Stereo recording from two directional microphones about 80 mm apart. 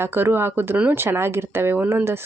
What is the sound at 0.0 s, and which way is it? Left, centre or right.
Speech, right.